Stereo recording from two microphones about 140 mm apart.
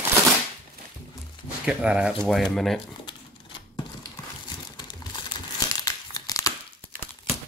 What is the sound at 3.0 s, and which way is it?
Typewriter, 35° left (ahead or behind).